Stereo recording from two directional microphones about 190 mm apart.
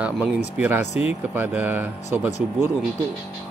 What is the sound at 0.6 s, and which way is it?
A man's voice, 10° right (ahead or behind).